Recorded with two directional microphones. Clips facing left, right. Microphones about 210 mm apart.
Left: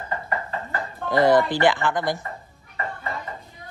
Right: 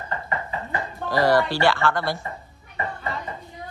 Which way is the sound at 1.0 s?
20° left (ahead or behind).